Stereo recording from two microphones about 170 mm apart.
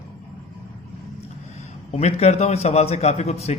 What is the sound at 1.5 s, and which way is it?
A man's voice, 40° left (ahead or behind).